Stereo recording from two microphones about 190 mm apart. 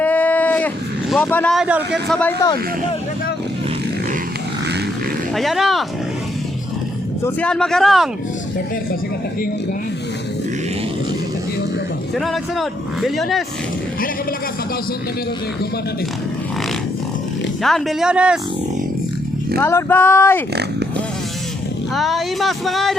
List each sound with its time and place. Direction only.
0.0 s a sound: 10° left (ahead or behind)
1.2 s speech: 10° left (ahead or behind)
1.5 s speech: 5° right (ahead or behind)
5.3 s speech: centre (ahead or behind)
7.3 s speech: 5° left (ahead or behind)
12.1 s speech: centre (ahead or behind)
17.6 s speech: centre (ahead or behind)
19.5 s speech: 10° left (ahead or behind)
21.9 s speech: centre (ahead or behind)